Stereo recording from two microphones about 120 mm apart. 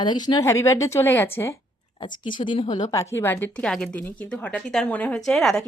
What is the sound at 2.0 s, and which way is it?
Speech, 40° left (ahead or behind).